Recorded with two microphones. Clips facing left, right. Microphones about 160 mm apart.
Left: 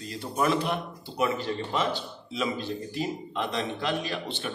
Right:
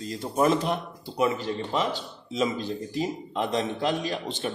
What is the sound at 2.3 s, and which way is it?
A man's voice, 40° right (ahead or behind).